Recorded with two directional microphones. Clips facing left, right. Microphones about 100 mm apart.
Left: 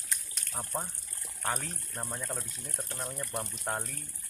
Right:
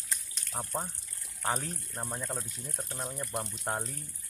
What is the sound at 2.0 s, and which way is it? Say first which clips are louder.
Speech: even; 10° right (ahead or behind).